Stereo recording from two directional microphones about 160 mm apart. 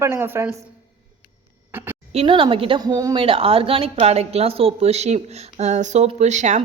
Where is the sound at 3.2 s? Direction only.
35° right (ahead or behind).